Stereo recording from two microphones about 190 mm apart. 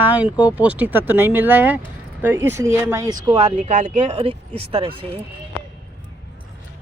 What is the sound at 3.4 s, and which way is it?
Speech, 40° right (ahead or behind).